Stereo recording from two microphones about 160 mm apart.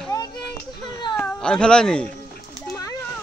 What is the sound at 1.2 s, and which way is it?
Speech, 5° left (ahead or behind).